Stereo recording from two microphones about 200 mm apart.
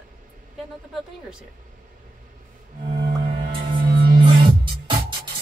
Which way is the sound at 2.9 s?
20° right (ahead or behind).